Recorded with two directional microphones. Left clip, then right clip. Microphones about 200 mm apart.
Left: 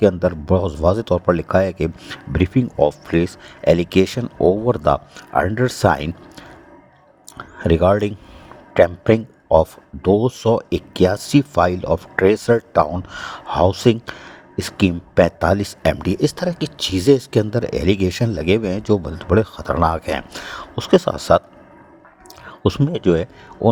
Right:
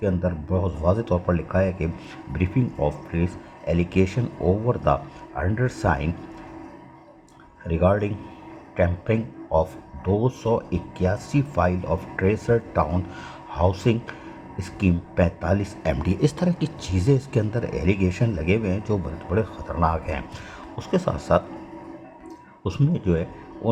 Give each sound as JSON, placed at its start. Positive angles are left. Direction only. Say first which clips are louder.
{"t": 0.0, "sound": "speech", "louder": "left 10 dB", "side_deg": 45}
{"t": 7.6, "sound": "speech", "louder": "left 7 dB", "side_deg": 50}
{"t": 22.6, "sound": "speech", "louder": "left 9 dB", "side_deg": 40}